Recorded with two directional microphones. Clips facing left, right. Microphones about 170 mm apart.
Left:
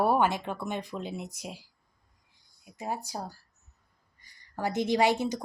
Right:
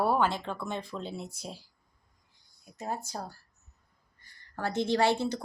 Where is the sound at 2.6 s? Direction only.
10° left (ahead or behind).